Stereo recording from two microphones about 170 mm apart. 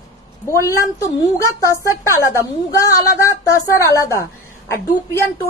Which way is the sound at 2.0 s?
15° left (ahead or behind).